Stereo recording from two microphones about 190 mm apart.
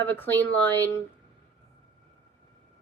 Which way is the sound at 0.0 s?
10° left (ahead or behind).